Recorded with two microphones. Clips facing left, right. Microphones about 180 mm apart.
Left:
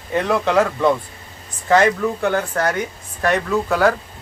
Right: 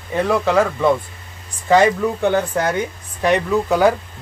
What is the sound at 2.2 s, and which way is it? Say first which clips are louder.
Speech: right 2 dB; 15° right (ahead or behind).